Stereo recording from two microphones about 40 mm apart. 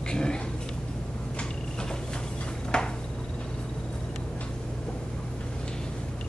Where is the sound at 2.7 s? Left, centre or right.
Left.